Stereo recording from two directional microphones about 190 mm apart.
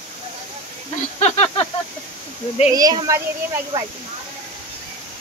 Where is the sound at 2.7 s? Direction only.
20° right (ahead or behind).